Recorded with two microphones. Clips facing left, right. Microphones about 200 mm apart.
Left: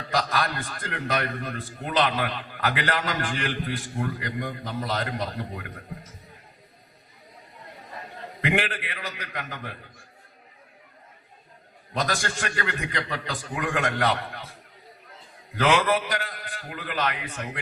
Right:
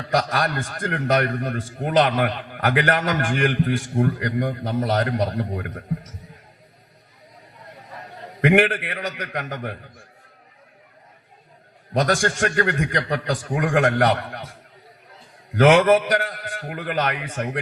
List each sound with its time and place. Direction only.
0.1 s a man's voice: 60° right (ahead or behind)
8.4 s a man's voice: 60° right (ahead or behind)
11.9 s a man's voice: 55° right (ahead or behind)
15.5 s a man's voice: 55° right (ahead or behind)